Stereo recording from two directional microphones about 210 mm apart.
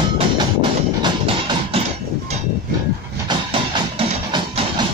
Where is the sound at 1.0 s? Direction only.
20° right (ahead or behind).